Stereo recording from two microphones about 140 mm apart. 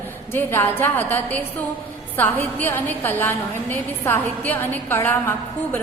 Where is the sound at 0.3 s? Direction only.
15° left (ahead or behind).